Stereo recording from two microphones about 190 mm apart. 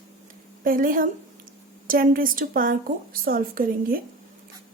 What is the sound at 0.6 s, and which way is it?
A woman's voice, 45° right (ahead or behind).